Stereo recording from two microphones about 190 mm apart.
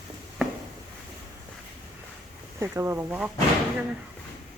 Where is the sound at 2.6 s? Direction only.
15° right (ahead or behind).